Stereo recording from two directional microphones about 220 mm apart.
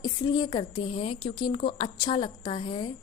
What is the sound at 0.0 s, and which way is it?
A woman's voice, 20° left (ahead or behind).